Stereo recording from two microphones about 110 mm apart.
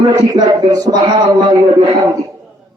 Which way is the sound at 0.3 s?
35° right (ahead or behind).